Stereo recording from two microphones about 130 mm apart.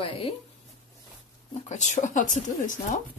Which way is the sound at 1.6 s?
65° left (ahead or behind).